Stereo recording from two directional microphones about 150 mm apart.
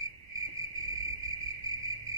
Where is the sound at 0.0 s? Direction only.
20° right (ahead or behind).